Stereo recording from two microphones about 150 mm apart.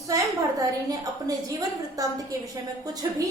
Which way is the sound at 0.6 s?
25° right (ahead or behind).